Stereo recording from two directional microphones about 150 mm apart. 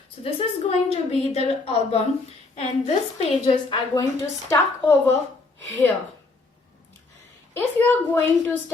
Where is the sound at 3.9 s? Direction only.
20° left (ahead or behind).